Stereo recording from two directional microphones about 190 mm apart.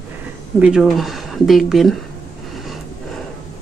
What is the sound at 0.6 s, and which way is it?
A woman's voice, centre (ahead or behind).